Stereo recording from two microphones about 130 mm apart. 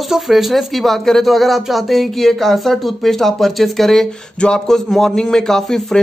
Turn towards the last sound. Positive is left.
turn(degrees=5)  # may be behind; listen again after turning